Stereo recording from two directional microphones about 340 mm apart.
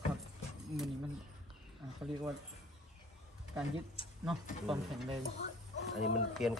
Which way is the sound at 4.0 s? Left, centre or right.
Centre.